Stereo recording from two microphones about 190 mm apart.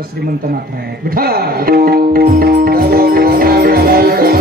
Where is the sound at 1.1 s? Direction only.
55° right (ahead or behind).